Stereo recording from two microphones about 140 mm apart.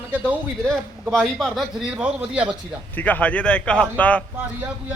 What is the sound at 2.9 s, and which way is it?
Speech, 10° left (ahead or behind).